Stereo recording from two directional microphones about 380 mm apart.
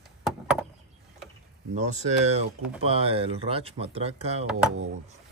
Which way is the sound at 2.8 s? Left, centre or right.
Centre.